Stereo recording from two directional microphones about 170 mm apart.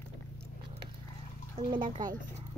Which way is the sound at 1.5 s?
30° right (ahead or behind).